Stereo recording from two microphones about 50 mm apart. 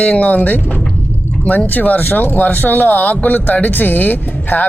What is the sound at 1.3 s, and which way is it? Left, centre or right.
Music, left.